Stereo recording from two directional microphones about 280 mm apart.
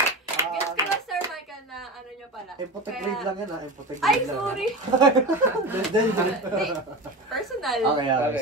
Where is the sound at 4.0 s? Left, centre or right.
Centre.